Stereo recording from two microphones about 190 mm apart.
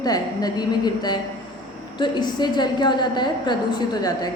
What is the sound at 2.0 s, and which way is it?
A woman's voice, 25° left (ahead or behind).